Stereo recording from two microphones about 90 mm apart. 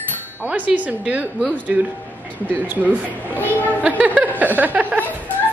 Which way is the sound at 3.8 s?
15° right (ahead or behind).